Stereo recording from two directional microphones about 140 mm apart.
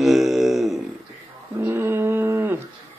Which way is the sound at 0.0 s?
Centre (ahead or behind).